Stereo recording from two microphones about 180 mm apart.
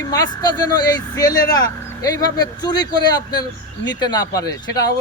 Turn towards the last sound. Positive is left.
turn(degrees=20)  # may be behind; listen again after turning